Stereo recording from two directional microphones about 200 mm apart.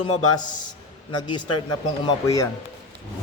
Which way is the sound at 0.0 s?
25° left (ahead or behind).